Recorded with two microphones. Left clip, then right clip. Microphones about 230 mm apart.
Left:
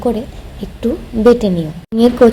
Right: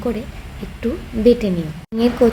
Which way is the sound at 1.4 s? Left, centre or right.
Centre.